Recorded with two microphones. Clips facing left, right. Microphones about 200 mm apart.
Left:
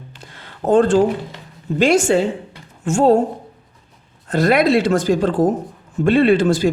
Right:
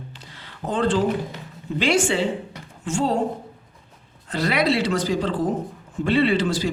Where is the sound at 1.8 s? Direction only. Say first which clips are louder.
Left 6 dB; 45° left (ahead or behind).